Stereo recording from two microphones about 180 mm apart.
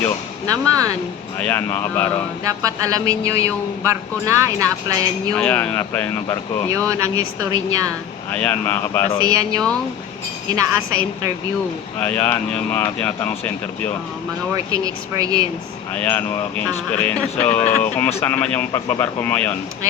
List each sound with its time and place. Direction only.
0.4 s speech: 20° right (ahead or behind)
1.4 s speech: 10° left (ahead or behind)
2.4 s a man's voice: 20° right (ahead or behind)
5.3 s speech: 5° left (ahead or behind)
6.7 s a man's voice: 20° right (ahead or behind)
8.3 s speech: 10° left (ahead or behind)
9.3 s a man's voice: 20° right (ahead or behind)
11.9 s speech: 10° left (ahead or behind)
14.5 s speech: 20° right (ahead or behind)
16.0 s speech: 10° left (ahead or behind)